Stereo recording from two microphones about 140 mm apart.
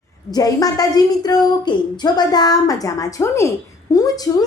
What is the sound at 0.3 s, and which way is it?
A woman's voice, 25° left (ahead or behind).